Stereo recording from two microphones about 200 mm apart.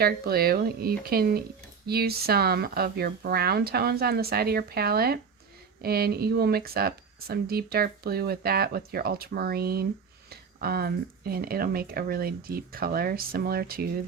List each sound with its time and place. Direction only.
0.0 s speech: 50° right (ahead or behind)